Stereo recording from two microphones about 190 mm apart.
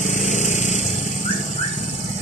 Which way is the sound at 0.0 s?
40° left (ahead or behind).